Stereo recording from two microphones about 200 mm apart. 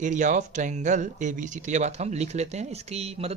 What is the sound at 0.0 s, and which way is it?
Speech, 40° right (ahead or behind).